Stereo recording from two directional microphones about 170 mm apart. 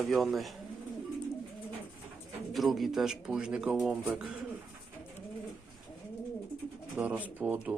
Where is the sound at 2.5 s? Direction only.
Centre (ahead or behind).